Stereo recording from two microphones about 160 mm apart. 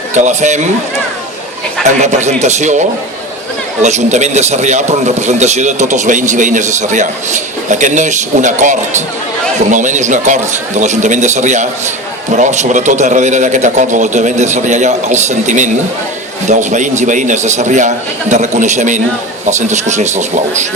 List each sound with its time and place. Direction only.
0.1 s speech: 50° right (ahead or behind)
2.0 s speech: 45° right (ahead or behind)
3.8 s speech: 45° right (ahead or behind)